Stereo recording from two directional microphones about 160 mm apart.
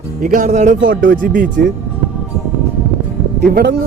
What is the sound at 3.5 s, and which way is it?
Speech, 90° right.